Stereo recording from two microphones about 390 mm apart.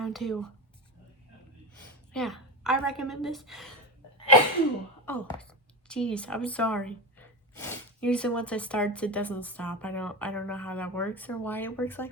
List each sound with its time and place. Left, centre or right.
0.0 s a woman's voice: centre
2.1 s a woman's voice: centre
5.0 s a woman's voice: centre